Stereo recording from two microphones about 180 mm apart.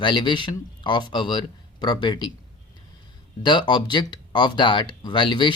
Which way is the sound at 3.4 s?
25° left (ahead or behind).